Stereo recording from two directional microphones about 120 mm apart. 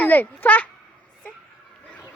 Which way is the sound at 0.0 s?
15° left (ahead or behind).